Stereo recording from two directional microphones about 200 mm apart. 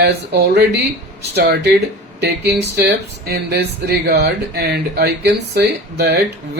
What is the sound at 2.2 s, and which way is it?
Speech, 55° right (ahead or behind).